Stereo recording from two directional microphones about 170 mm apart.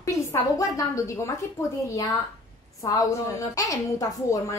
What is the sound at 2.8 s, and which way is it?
A woman's voice, 20° left (ahead or behind).